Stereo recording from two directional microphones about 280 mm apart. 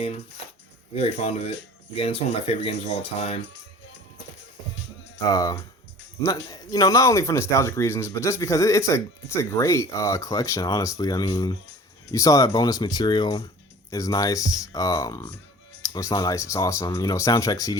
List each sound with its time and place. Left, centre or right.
0.9 s speech: left
5.2 s speech: centre